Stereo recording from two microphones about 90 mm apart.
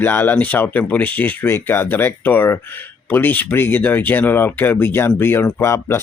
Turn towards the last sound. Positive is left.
turn(degrees=30)  # may be behind; listen again after turning